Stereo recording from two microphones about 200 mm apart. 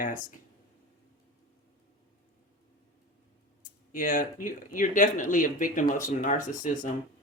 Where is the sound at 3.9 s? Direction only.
45° left (ahead or behind).